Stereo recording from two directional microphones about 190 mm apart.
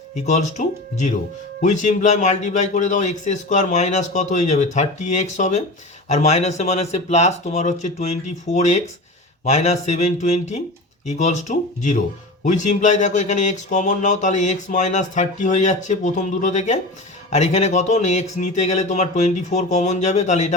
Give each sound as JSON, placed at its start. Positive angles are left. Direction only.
{"t": 0.3, "sound": "speech", "side_deg": 35}